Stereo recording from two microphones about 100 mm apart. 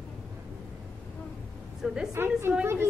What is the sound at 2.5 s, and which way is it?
Speech, 20° right (ahead or behind).